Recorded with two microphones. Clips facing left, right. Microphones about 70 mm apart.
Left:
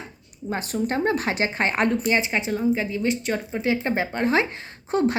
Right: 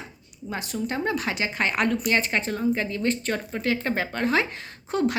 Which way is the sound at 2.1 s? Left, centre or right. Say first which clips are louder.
Left 1 dB; centre.